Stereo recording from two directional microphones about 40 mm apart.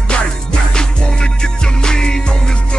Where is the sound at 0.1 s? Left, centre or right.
Left.